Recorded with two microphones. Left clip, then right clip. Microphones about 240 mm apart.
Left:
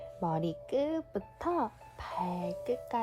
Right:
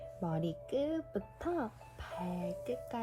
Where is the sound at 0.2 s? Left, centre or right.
Left.